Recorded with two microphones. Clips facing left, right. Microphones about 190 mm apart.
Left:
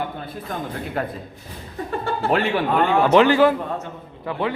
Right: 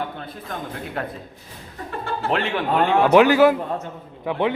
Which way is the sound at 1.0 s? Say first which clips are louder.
Left 3 dB; centre (ahead or behind).